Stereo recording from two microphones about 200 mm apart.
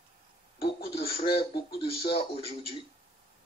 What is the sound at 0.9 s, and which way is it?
Speech, 30° left (ahead or behind).